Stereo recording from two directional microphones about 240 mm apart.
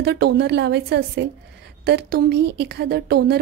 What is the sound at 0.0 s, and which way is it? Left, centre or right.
Speech, right.